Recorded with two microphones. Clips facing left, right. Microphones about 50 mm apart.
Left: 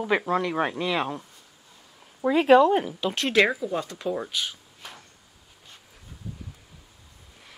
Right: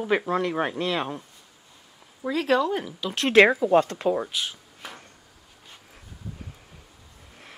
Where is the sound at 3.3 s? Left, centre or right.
Right.